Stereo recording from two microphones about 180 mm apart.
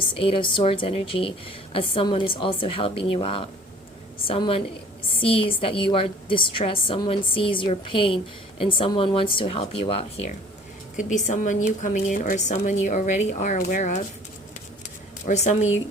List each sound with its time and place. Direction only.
0.2 s a woman's voice: 30° left (ahead or behind)
10.9 s speech: 45° left (ahead or behind)
15.3 s a woman's voice: 40° left (ahead or behind)